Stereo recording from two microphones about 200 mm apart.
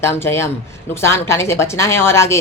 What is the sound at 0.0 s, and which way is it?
A woman's voice, 10° left (ahead or behind).